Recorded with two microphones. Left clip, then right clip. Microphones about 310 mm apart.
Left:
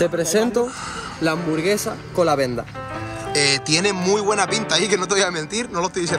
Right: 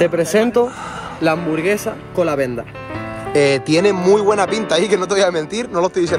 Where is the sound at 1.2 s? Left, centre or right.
Centre.